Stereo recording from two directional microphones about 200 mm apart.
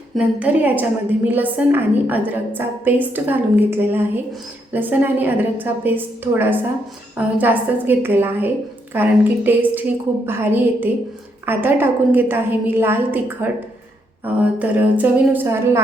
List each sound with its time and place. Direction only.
0.2 s a woman's voice: 10° right (ahead or behind)